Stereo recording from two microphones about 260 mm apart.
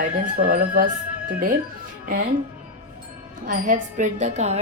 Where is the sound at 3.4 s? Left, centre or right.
Right.